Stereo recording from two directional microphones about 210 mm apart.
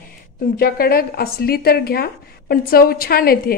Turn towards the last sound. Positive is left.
turn(degrees=45)  # may be behind; listen again after turning